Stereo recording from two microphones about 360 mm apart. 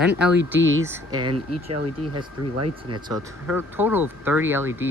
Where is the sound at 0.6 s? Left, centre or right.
Right.